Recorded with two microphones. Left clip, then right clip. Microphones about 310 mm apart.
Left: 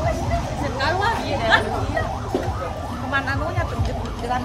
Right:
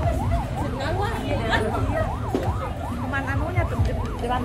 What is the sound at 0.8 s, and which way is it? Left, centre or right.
Chatter, centre.